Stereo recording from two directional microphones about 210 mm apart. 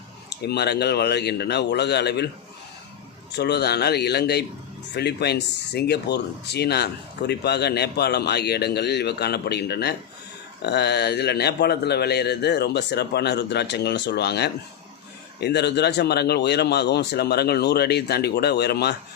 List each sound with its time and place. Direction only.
0.4 s speech: 50° left (ahead or behind)
3.3 s speech: 50° left (ahead or behind)